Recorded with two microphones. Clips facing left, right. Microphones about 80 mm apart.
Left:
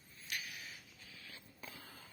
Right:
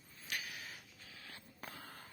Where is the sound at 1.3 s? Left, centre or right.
Right.